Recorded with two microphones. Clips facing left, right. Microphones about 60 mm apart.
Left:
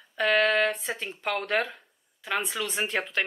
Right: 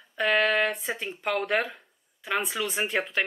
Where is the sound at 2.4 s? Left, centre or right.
Centre.